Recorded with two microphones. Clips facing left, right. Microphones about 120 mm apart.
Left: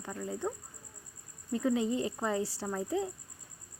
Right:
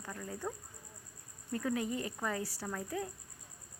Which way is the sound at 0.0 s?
20° left (ahead or behind).